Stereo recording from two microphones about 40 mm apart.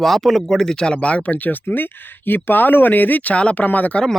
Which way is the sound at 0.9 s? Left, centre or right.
Left.